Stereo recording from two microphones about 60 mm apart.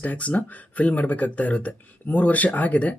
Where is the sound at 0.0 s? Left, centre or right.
Left.